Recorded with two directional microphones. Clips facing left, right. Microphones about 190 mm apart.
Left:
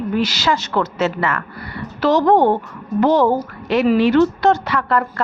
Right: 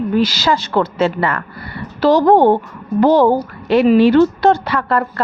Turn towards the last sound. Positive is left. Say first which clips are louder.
# right 2 dB
turn(degrees=-35)  # may be behind; listen again after turning